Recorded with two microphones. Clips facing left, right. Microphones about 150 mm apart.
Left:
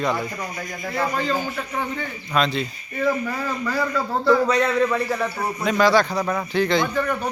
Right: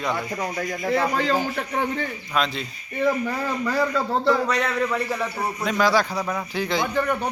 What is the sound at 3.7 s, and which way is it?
Speech, 25° right (ahead or behind).